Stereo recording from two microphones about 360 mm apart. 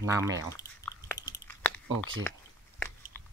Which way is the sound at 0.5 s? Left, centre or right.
Centre.